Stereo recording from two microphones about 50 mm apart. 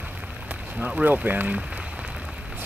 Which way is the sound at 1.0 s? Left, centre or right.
Right.